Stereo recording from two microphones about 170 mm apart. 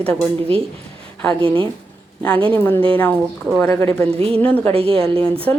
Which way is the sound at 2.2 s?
5° left (ahead or behind).